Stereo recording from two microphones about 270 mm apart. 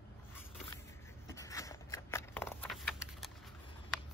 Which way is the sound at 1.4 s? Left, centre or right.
Centre.